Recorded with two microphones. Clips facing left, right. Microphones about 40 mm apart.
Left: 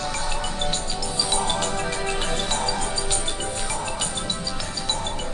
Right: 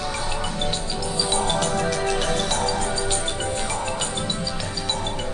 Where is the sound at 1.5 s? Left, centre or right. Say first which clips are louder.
Right 3 dB; left.